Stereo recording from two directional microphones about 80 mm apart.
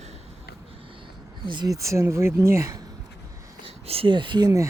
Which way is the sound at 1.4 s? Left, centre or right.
Right.